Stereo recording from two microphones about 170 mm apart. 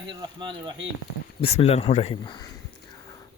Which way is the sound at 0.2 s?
30° right (ahead or behind).